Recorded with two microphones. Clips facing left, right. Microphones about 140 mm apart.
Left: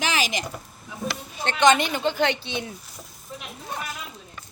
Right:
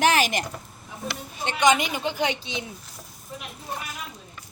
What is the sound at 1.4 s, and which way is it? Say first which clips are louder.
Speech: left 2 dB; 10° right (ahead or behind).